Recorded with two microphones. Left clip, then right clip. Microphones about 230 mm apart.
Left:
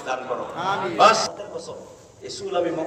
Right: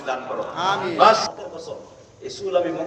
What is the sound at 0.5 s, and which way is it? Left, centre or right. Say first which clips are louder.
Speech: right 4 dB; right.